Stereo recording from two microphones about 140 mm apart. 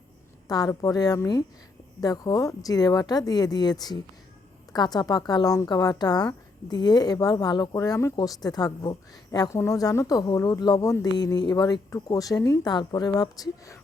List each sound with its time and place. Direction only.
0.4 s speech: 25° left (ahead or behind)